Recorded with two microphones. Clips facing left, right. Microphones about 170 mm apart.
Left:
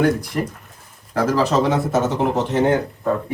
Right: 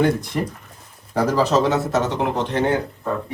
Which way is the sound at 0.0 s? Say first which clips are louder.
Left 1 dB; centre (ahead or behind).